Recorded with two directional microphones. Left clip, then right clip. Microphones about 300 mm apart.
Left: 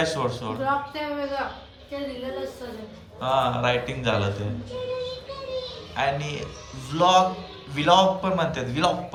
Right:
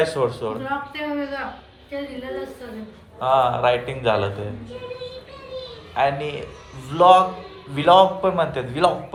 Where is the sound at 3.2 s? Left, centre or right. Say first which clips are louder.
Right 5 dB; centre.